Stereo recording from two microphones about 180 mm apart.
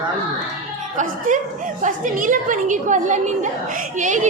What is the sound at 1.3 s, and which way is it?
A woman's voice, 45° right (ahead or behind).